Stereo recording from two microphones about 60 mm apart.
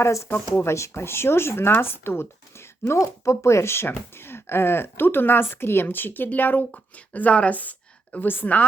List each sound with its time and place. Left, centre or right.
0.0 s a woman's voice: left